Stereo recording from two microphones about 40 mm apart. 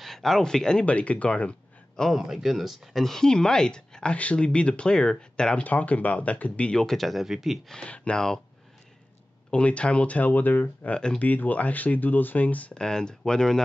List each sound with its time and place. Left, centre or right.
0.0 s speech: centre
0.8 s speech: left
2.1 s speech: centre
3.0 s speech: centre
3.3 s speech: centre
5.6 s speech: left
6.8 s speech: centre
7.8 s speech: left
9.5 s speech: left
12.7 s speech: centre